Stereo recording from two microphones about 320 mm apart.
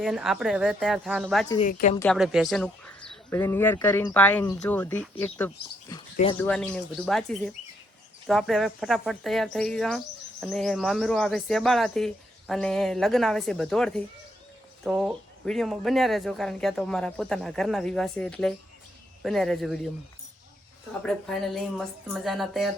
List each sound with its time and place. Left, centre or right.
0.0 s speech: centre
1.5 s a woman's voice: centre
2.0 s speech: centre
21.1 s speech: centre